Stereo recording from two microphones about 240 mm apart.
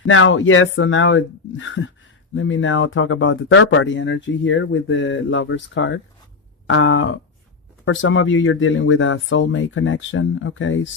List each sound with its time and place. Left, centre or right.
0.0 s speech: left